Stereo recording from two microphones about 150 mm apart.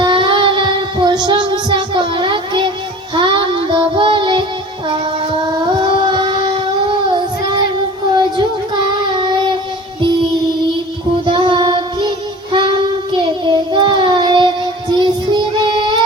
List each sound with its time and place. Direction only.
0.0 s child singing: 30° right (ahead or behind)
5.6 s music: 30° right (ahead or behind)
8.1 s a sound: 30° right (ahead or behind)
9.1 s music: 30° right (ahead or behind)
11.3 s child singing: 35° right (ahead or behind)